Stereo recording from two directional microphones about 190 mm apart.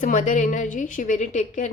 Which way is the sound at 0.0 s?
40° left (ahead or behind).